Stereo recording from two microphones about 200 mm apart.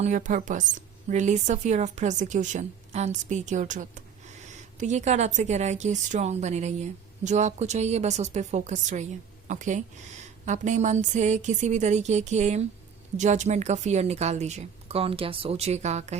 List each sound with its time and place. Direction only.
0.0 s a woman's voice: 40° right (ahead or behind)